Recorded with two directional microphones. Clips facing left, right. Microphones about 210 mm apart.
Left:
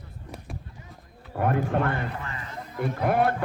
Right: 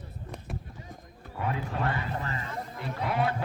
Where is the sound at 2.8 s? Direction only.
50° left (ahead or behind).